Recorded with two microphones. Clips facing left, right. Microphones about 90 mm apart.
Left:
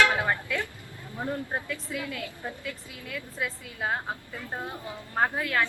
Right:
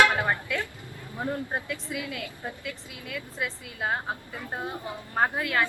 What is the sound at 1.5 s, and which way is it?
A woman's voice, 5° right (ahead or behind).